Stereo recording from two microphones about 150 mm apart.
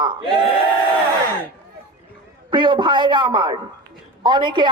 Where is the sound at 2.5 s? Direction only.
30° right (ahead or behind).